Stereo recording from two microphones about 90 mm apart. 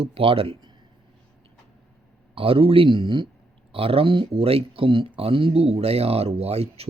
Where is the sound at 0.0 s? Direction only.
85° right.